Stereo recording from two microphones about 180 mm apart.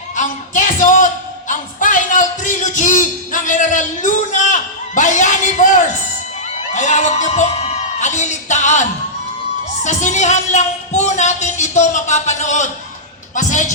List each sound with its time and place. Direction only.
0.2 s a woman's voice: 45° left (ahead or behind)